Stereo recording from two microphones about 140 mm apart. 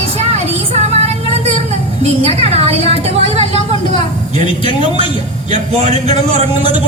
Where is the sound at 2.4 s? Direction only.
45° right (ahead or behind).